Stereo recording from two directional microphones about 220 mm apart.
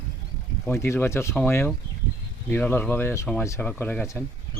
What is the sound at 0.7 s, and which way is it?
Speech, 10° left (ahead or behind).